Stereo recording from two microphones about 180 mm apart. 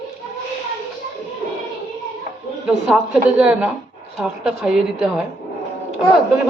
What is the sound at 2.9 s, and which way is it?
A woman's voice, 5° right (ahead or behind).